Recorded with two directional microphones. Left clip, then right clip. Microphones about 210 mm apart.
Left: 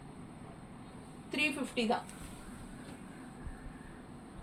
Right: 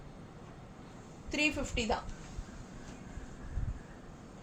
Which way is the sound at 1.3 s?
20° right (ahead or behind).